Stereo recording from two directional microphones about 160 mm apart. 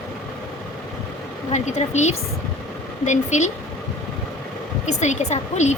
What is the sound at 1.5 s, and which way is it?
Speech, 45° left (ahead or behind).